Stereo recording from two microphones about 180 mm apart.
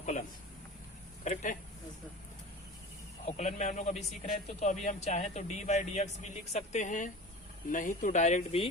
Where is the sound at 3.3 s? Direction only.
40° left (ahead or behind).